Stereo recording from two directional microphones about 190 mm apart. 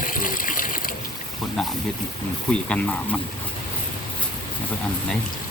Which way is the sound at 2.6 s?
5° left (ahead or behind).